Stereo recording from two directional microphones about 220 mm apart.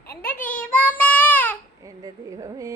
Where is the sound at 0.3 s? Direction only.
5° left (ahead or behind).